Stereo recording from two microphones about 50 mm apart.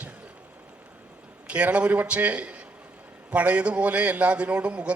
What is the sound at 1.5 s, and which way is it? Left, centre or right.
A man's voice, right.